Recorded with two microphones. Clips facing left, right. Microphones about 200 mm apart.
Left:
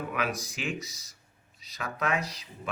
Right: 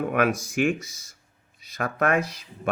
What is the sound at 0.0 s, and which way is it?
Speech, 55° right (ahead or behind).